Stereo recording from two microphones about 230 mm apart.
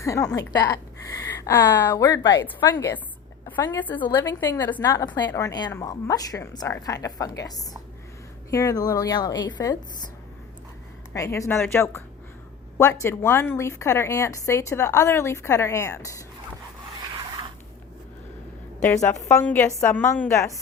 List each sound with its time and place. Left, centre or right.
0.0 s a woman's voice: centre
11.1 s a woman's voice: centre
19.0 s a woman's voice: centre